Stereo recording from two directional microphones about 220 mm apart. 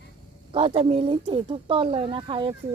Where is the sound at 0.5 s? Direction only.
25° right (ahead or behind).